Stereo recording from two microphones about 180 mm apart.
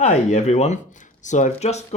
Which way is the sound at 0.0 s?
40° left (ahead or behind).